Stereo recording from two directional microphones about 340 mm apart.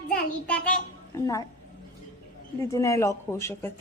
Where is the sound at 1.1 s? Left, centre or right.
Centre.